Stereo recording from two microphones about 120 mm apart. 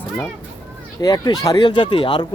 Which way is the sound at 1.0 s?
35° left (ahead or behind).